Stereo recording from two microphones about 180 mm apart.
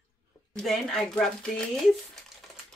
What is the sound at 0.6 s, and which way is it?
Speech, centre (ahead or behind).